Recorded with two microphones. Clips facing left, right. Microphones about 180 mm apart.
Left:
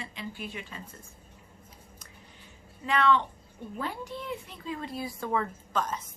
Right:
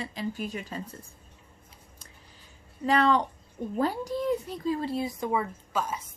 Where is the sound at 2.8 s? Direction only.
40° right (ahead or behind).